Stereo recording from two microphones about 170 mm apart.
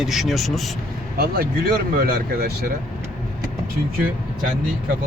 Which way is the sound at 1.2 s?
65° right (ahead or behind).